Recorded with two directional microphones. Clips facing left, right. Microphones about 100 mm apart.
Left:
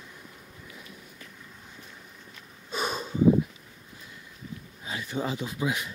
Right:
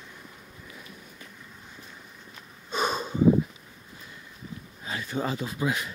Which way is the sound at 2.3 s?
35° right (ahead or behind).